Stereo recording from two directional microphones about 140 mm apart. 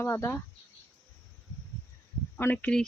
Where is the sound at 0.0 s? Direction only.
20° left (ahead or behind).